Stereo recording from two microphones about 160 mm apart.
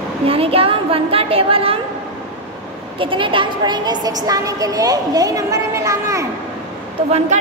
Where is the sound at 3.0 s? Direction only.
30° right (ahead or behind).